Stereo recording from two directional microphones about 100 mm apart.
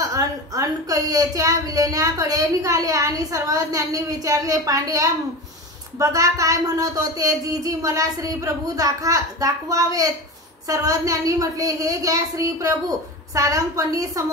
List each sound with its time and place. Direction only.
0.0 s a woman's voice: 35° right (ahead or behind)